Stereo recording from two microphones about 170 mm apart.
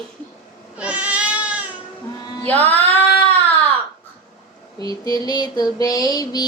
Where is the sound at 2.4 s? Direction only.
10° left (ahead or behind).